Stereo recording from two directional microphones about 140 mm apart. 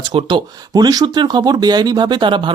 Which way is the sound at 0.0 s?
40° right (ahead or behind).